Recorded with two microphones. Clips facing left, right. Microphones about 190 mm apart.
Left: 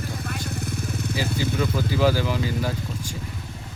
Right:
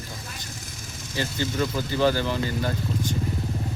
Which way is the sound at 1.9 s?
5° left (ahead or behind).